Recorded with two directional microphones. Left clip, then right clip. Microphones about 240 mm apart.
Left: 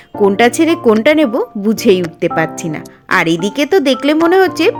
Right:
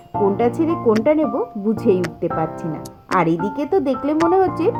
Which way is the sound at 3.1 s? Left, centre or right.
Left.